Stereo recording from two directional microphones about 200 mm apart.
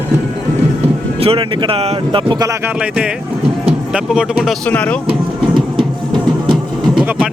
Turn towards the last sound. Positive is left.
turn(degrees=0)  # may be behind; listen again after turning